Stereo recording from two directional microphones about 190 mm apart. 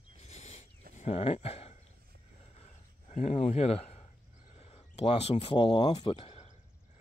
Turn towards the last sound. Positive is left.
turn(degrees=30)  # may be behind; listen again after turning